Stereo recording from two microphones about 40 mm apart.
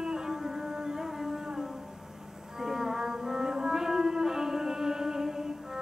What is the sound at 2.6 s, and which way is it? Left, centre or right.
Music, centre.